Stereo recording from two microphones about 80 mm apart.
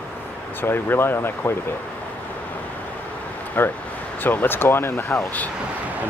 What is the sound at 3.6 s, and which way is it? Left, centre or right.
Speech, left.